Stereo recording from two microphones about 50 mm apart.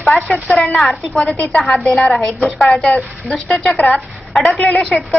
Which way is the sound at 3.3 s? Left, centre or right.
Left.